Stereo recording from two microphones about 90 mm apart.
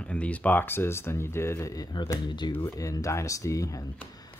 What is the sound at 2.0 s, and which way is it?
Speech, 55° left (ahead or behind).